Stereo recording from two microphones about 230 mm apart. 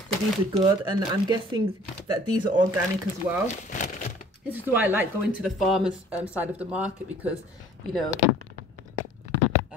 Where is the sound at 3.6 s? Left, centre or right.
Left.